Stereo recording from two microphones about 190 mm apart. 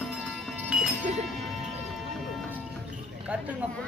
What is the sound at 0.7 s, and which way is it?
Sheep, 5° right (ahead or behind).